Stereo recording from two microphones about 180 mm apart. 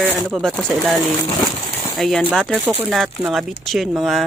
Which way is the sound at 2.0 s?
Centre (ahead or behind).